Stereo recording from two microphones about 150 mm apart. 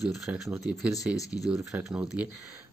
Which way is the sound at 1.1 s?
25° left (ahead or behind).